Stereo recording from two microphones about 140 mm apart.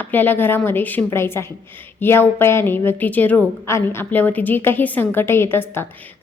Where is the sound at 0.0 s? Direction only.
15° left (ahead or behind).